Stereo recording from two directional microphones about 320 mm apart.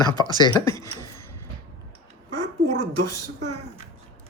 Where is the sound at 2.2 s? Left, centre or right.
Right.